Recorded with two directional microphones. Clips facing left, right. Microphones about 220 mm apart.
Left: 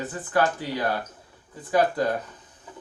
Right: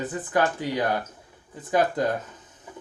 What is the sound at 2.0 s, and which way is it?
Speech, 20° right (ahead or behind).